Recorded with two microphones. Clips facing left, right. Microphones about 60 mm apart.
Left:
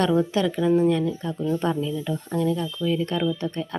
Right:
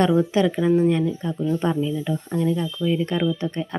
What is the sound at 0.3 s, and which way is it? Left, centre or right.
Speech, right.